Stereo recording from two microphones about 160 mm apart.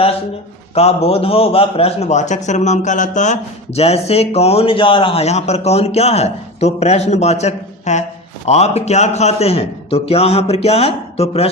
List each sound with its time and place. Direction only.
0.7 s a man's voice: 40° left (ahead or behind)